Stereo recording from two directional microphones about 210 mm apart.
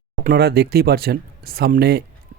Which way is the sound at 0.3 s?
50° right (ahead or behind).